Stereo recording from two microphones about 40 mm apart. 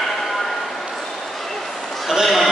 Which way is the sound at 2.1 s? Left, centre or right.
Centre.